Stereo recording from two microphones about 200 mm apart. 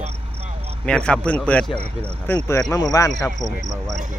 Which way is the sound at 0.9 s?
5° left (ahead or behind).